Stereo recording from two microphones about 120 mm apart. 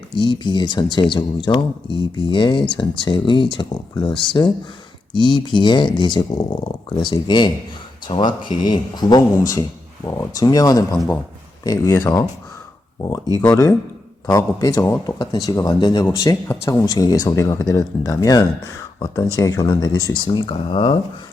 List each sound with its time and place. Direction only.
0.1 s speech: 40° left (ahead or behind)
13.0 s speech: 30° left (ahead or behind)
15.0 s speech: 40° left (ahead or behind)